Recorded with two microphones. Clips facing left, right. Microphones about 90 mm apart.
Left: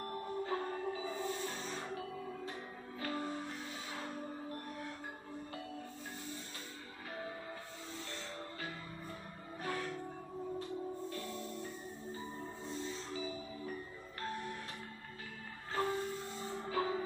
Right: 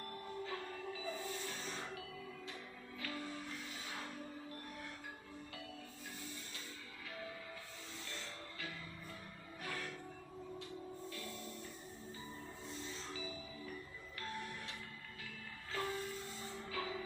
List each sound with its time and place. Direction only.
0.0 s music: 35° left (ahead or behind)
9.6 s music: 35° left (ahead or behind)
11.1 s music: 35° left (ahead or behind)
13.1 s music: 40° left (ahead or behind)
15.7 s music: 35° left (ahead or behind)